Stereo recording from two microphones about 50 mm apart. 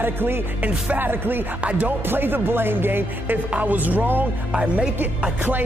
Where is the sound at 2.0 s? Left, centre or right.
Right.